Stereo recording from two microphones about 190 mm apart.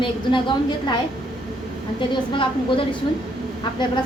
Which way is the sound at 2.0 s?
25° left (ahead or behind).